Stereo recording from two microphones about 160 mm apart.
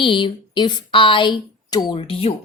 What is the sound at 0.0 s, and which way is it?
A woman's voice, 30° left (ahead or behind).